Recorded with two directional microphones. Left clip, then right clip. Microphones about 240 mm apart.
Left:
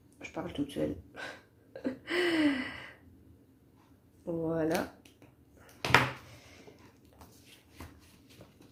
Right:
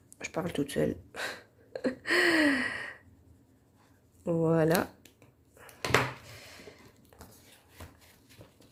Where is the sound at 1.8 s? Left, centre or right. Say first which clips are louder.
Right 5 dB; right.